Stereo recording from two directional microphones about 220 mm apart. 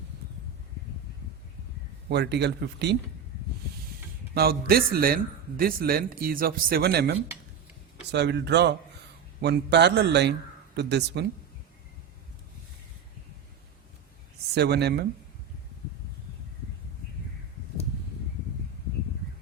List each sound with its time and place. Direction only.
2.0 s a man's voice: 50° right (ahead or behind)
4.4 s a man's voice: 45° right (ahead or behind)
14.5 s a man's voice: 50° right (ahead or behind)